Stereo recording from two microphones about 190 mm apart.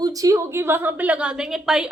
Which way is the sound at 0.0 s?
20° right (ahead or behind).